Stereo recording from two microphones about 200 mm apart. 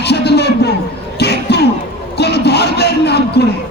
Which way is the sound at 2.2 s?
55° left (ahead or behind).